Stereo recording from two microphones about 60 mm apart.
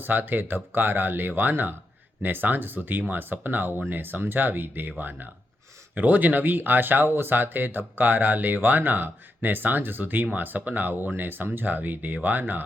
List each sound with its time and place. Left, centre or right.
0.0 s speech: right